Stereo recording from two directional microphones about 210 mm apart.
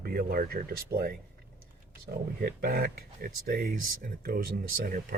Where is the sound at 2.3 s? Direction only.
45° right (ahead or behind).